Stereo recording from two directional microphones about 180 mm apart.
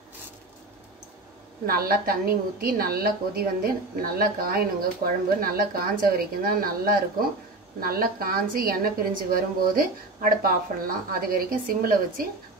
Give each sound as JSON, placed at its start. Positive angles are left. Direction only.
{"t": 1.7, "sound": "a woman's voice", "side_deg": -55}